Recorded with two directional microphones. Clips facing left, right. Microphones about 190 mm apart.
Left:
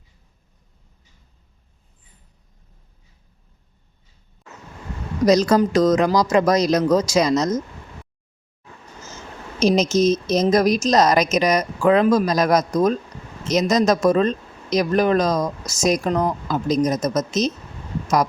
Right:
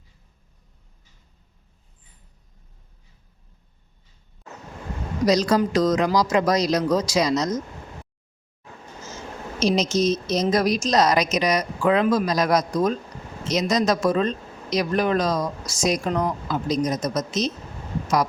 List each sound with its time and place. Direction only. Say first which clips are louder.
5.2 s speech: left 4 dB; 45° left (ahead or behind)
9.6 s speech: left 4 dB; 45° left (ahead or behind)